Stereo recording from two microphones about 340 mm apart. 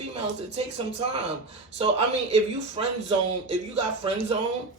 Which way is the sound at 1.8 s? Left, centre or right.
Centre.